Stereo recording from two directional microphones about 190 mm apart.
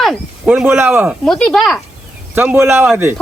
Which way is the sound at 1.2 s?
5° left (ahead or behind).